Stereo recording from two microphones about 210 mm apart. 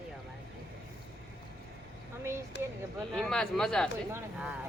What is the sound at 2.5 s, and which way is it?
Speech, 55° left (ahead or behind).